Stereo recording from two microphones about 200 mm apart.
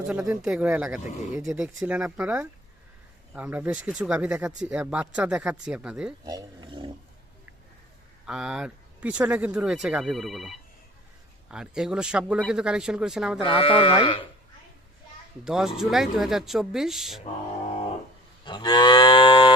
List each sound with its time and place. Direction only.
0.4 s speech: 5° right (ahead or behind)
6.2 s speech: 20° right (ahead or behind)
8.3 s speech: 5° right (ahead or behind)
13.4 s speech: 25° left (ahead or behind)
15.4 s speech: centre (ahead or behind)
18.4 s livestock: 20° left (ahead or behind)